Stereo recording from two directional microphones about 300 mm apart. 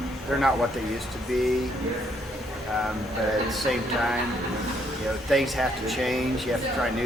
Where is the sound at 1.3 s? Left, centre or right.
Centre.